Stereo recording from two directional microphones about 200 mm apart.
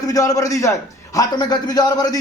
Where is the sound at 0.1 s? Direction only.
15° left (ahead or behind).